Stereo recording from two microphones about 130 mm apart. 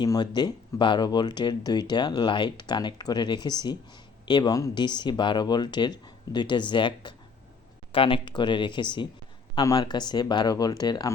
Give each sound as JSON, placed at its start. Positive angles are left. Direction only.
{"t": 0.0, "sound": "speech", "side_deg": 35}